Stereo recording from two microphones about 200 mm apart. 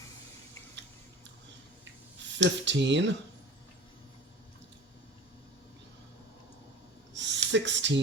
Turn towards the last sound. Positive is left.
turn(degrees=-65)  # may be behind; listen again after turning